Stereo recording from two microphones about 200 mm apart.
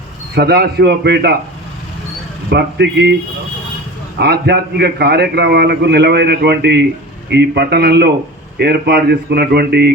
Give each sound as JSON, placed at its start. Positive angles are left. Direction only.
{"t": 0.3, "sound": "a man's voice", "side_deg": -55}
{"t": 2.5, "sound": "a man's voice", "side_deg": -60}
{"t": 4.2, "sound": "a man's voice", "side_deg": -55}